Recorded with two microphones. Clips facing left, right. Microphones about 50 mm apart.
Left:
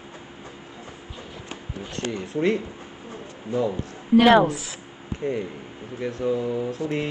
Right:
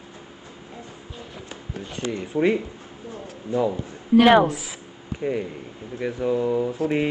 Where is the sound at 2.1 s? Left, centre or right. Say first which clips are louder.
Right 2 dB; centre.